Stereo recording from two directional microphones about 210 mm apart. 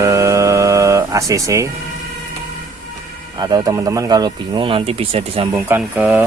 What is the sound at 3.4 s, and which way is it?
Speech, 20° right (ahead or behind).